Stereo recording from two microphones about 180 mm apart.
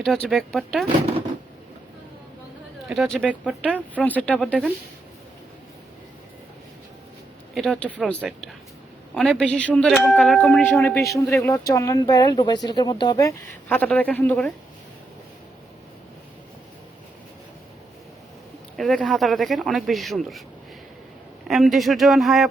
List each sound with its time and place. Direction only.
0.0 s a man's voice: centre (ahead or behind)
2.9 s a man's voice: centre (ahead or behind)
7.5 s a man's voice: centre (ahead or behind)
11.1 s a man's voice: centre (ahead or behind)
11.4 s a woman's voice: 20° left (ahead or behind)
18.8 s a man's voice: centre (ahead or behind)
21.4 s a man's voice: centre (ahead or behind)